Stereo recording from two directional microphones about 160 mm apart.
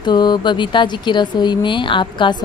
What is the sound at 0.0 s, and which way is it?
Speech, 25° left (ahead or behind).